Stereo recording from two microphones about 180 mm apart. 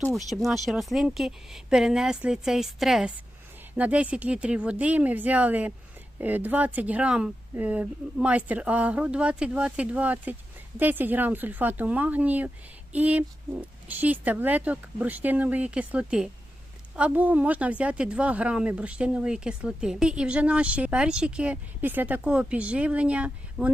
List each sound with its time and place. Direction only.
0.1 s a woman's voice: centre (ahead or behind)